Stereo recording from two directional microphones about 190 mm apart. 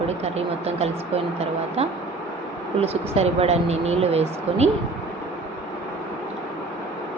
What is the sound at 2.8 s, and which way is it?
Speech, 35° right (ahead or behind).